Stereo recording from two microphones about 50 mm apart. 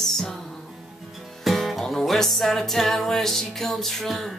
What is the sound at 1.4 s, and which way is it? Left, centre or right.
Music, centre.